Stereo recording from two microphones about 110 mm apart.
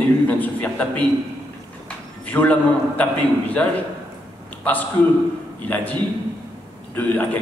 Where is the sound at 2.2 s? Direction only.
15° left (ahead or behind).